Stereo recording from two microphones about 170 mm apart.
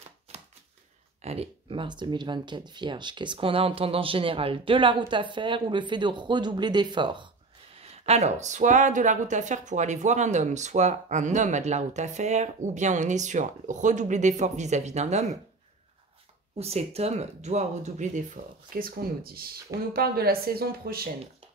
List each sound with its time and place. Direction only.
0.3 s a sound: 40° right (ahead or behind)
1.2 s speech: 35° right (ahead or behind)
16.5 s a woman's voice: 35° right (ahead or behind); by 21.1 s 60° right (ahead or behind)